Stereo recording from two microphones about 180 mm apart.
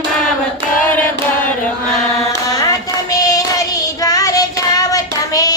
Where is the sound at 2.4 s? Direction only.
20° left (ahead or behind).